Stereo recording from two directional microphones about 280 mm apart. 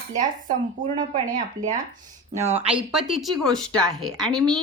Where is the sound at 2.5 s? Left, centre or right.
Centre.